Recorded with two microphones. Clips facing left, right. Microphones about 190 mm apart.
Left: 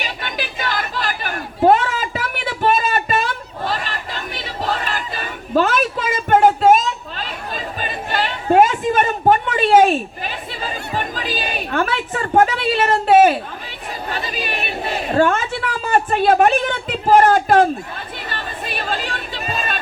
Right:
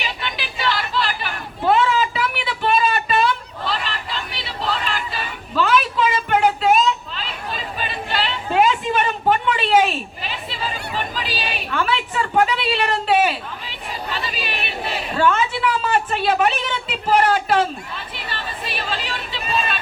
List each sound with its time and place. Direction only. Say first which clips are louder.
0.0 s chatter: left 2 dB; 45° left (ahead or behind)